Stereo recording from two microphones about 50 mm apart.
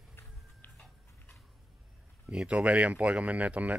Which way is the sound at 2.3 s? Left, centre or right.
Right.